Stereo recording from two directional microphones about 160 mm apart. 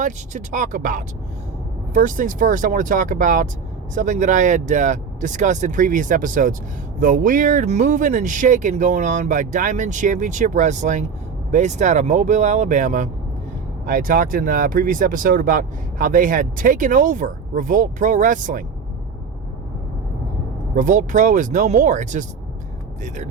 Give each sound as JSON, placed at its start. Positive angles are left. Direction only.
{"t": 0.0, "sound": "speech", "side_deg": -50}
{"t": 13.8, "sound": "speech", "side_deg": -60}
{"t": 20.7, "sound": "speech", "side_deg": -55}